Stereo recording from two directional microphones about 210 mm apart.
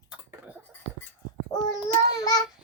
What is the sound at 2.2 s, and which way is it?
Child singing, 15° left (ahead or behind).